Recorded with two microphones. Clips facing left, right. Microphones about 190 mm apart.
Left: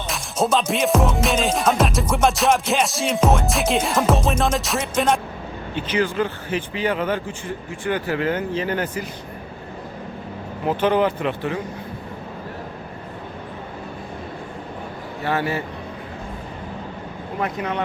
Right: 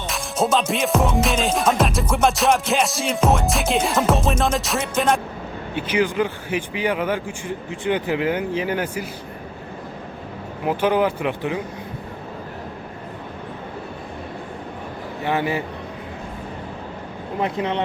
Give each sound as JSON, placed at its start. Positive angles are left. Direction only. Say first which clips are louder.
{"t": 0.1, "sound": "music", "louder": "even", "side_deg": 0}
{"t": 5.7, "sound": "speech", "louder": "right 1 dB", "side_deg": -15}
{"t": 10.7, "sound": "speech", "louder": "even", "side_deg": -10}
{"t": 15.2, "sound": "speech", "louder": "right 1 dB", "side_deg": -15}
{"t": 17.4, "sound": "speech", "louder": "right 2 dB", "side_deg": -25}